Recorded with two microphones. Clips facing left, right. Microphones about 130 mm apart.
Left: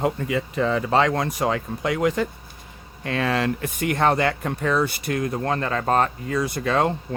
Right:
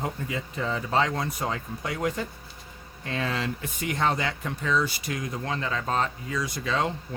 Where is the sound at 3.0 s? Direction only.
70° left (ahead or behind).